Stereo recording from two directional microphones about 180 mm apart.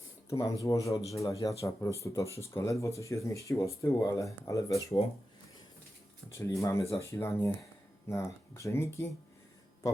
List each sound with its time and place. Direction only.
0.3 s speech: 20° left (ahead or behind)
6.3 s speech: 15° left (ahead or behind)